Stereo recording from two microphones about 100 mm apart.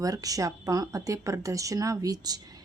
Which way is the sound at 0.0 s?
35° right (ahead or behind).